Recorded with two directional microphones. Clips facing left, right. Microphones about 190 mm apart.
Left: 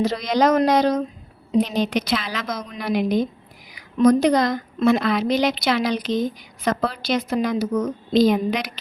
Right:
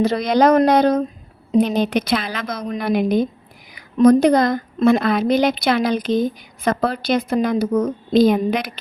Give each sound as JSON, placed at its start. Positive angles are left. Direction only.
{"t": 0.0, "sound": "a woman's voice", "side_deg": -60}